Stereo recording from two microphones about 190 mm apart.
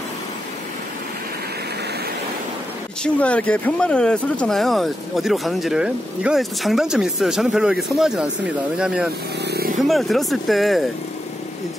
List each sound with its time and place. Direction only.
3.0 s speech: 5° left (ahead or behind)
9.4 s vehicle: 55° right (ahead or behind)
9.8 s speech: centre (ahead or behind)